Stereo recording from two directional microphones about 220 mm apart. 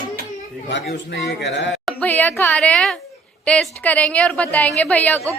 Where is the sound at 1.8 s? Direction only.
5° left (ahead or behind).